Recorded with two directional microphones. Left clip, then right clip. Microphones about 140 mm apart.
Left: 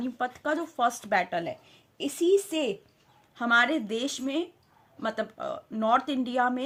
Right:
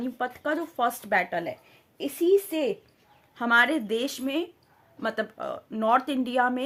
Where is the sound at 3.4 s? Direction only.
20° right (ahead or behind).